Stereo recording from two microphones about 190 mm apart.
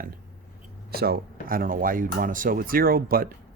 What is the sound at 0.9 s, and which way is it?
Speech, 55° right (ahead or behind).